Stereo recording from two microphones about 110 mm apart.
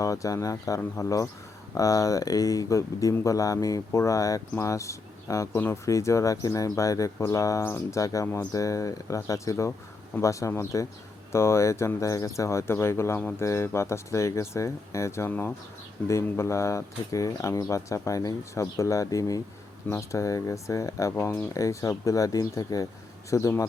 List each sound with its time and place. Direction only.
0.0 s speech: 30° left (ahead or behind)